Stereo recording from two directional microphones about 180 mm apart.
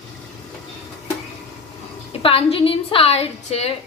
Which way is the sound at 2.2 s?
30° left (ahead or behind).